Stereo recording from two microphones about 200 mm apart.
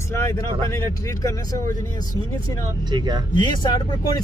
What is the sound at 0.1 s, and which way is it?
Vehicle, 15° left (ahead or behind).